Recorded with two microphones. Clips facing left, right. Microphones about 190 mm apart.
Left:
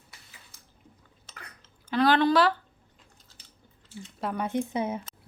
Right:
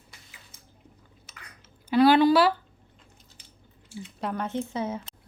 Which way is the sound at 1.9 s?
10° right (ahead or behind).